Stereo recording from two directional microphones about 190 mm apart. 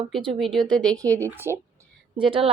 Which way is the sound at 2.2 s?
30° right (ahead or behind).